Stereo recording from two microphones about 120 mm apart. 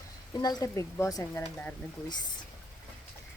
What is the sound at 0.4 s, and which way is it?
Speech, 25° left (ahead or behind).